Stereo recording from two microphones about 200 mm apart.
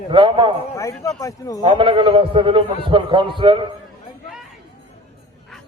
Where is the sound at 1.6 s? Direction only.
25° right (ahead or behind).